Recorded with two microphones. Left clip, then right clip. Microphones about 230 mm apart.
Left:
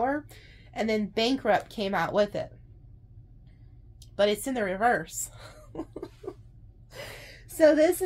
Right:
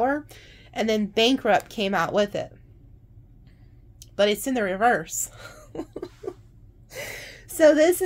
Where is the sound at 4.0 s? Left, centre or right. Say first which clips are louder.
Right 3 dB; right.